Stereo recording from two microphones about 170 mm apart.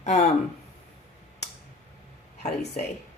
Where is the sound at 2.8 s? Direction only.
40° left (ahead or behind).